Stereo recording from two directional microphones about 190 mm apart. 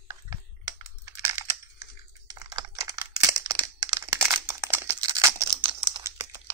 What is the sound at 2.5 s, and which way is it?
Computer keyboard, 15° right (ahead or behind).